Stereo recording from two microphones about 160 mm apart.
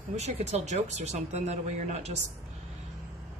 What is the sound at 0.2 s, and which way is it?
Speech, 45° right (ahead or behind).